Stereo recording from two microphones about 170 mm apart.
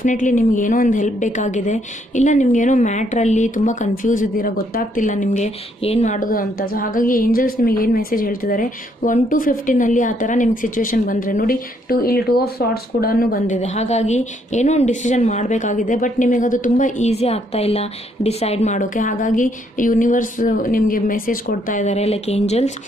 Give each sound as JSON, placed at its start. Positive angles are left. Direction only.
{"t": 0.0, "sound": "a woman's voice", "side_deg": 50}
{"t": 6.1, "sound": "a woman's voice", "side_deg": 55}
{"t": 13.6, "sound": "a woman's voice", "side_deg": 40}
{"t": 18.8, "sound": "a woman's voice", "side_deg": 50}